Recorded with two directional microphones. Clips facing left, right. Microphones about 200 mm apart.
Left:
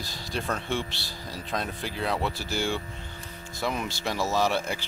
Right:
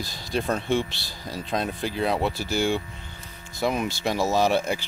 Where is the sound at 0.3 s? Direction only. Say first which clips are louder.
Right 6 dB; 15° right (ahead or behind).